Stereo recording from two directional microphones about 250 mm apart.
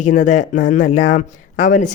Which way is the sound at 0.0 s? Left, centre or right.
Left.